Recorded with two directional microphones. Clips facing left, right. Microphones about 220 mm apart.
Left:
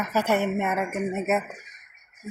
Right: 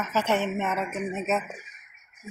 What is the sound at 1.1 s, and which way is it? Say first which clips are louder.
Speech: left 2 dB; 60° left (ahead or behind).